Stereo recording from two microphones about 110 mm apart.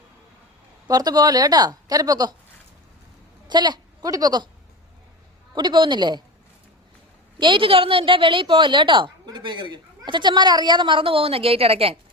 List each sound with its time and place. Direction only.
0.9 s a woman's voice: 35° right (ahead or behind)
3.5 s a woman's voice: 40° right (ahead or behind)
5.5 s a woman's voice: 45° right (ahead or behind)
7.3 s a woman's voice: 45° right (ahead or behind)